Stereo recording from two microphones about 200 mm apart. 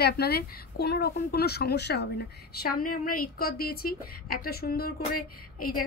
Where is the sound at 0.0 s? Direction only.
50° left (ahead or behind).